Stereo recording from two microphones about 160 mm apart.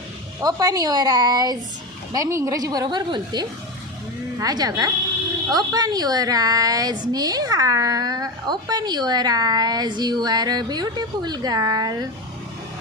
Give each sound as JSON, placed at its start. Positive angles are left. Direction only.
{"t": 0.4, "sound": "a child's voice", "side_deg": -25}